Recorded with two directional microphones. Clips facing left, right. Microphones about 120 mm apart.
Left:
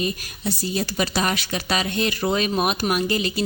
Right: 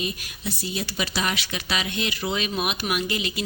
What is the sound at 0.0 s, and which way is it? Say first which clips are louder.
Speech: left 5 dB; 40° left (ahead or behind).